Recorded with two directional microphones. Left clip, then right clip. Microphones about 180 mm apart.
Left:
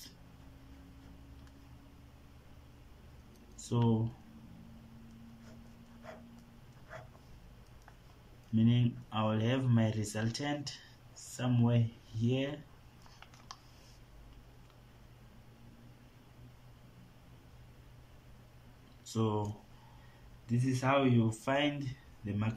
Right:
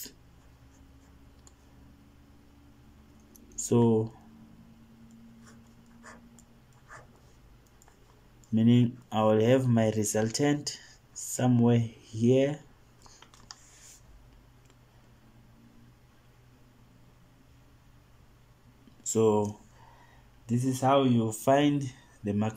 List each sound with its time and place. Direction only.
3.6 s speech: 30° right (ahead or behind)
8.5 s speech: 35° right (ahead or behind)
19.1 s speech: 40° right (ahead or behind)
20.5 s speech: 25° right (ahead or behind)